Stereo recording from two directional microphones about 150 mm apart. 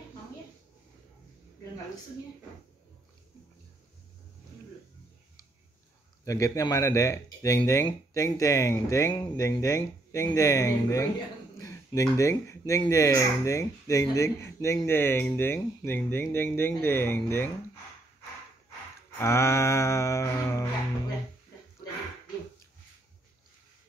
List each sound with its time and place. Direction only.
6.2 s speech: 20° left (ahead or behind)
11.5 s a sound: 20° left (ahead or behind)
12.9 s speech: 20° left (ahead or behind)
19.1 s speech: 20° left (ahead or behind)